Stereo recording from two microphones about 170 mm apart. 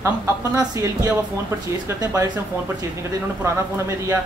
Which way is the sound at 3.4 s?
15° right (ahead or behind).